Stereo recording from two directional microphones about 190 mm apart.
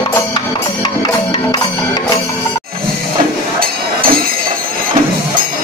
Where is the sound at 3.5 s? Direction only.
50° right (ahead or behind).